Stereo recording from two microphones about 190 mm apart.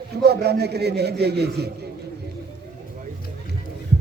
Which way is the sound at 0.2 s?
60° right (ahead or behind).